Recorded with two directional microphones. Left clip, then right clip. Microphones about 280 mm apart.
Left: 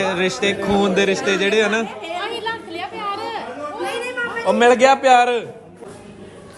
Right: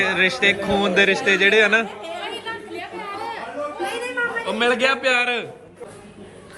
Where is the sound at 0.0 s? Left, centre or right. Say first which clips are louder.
Right 2 dB; centre.